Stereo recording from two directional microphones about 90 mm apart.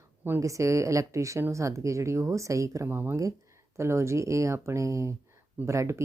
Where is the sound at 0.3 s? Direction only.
35° right (ahead or behind).